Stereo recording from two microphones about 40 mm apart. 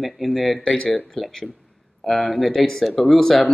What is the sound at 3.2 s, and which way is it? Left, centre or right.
Speech, centre.